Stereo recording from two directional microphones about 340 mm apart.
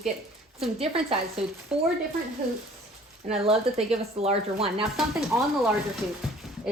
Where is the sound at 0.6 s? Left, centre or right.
Centre.